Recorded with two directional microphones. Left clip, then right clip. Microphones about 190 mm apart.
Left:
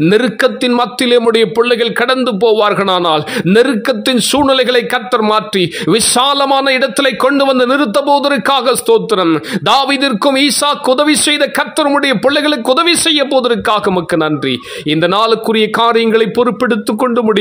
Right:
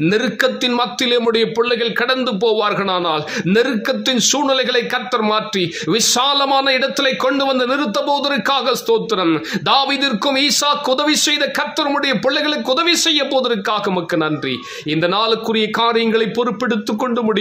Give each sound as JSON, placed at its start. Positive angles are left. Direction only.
{"t": 0.0, "sound": "a man's voice", "side_deg": 35}